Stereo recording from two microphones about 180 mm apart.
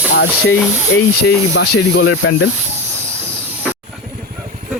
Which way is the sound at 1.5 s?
80° left.